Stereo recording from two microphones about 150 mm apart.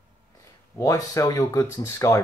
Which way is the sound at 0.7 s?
25° left (ahead or behind).